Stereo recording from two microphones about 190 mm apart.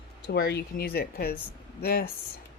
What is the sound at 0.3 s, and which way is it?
Speech, 55° left (ahead or behind).